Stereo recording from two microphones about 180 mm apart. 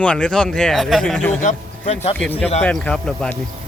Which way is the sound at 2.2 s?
10° left (ahead or behind).